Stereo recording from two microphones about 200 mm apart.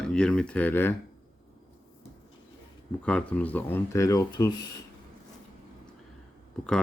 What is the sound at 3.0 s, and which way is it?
Speech, 5° left (ahead or behind).